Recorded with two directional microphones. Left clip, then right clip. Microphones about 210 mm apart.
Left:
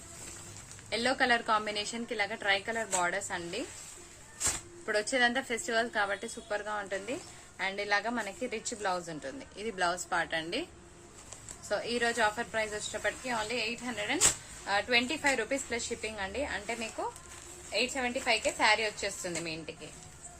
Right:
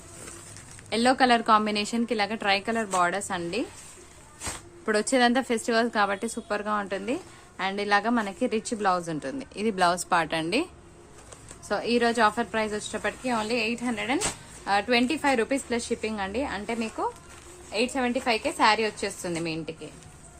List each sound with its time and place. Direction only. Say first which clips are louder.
0.9 s a woman's voice: right 7 dB; 55° right (ahead or behind)
4.9 s a woman's voice: right 6 dB; 55° right (ahead or behind)
11.7 s a woman's voice: right 6 dB; 55° right (ahead or behind)